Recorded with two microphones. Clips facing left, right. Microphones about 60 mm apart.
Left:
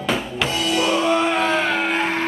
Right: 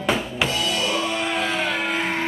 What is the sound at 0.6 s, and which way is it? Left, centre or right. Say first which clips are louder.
Music: left 4 dB; centre.